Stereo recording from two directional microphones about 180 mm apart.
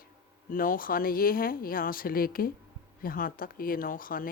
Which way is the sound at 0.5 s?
50° left (ahead or behind).